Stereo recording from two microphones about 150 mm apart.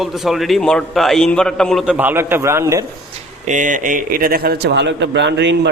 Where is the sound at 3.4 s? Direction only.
55° right (ahead or behind); by 4.7 s 90° right.